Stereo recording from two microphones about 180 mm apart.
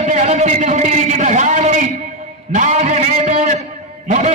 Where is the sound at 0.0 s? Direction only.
35° right (ahead or behind).